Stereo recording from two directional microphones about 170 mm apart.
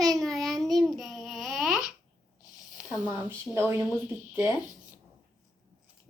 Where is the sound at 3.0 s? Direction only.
10° right (ahead or behind).